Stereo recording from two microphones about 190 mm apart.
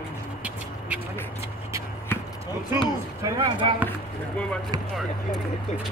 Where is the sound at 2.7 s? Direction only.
25° right (ahead or behind).